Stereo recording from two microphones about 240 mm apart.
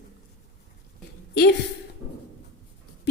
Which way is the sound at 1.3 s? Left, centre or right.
Left.